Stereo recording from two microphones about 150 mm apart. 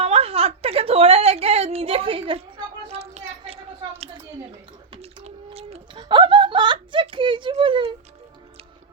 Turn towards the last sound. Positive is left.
turn(degrees=-35)  # may be behind; listen again after turning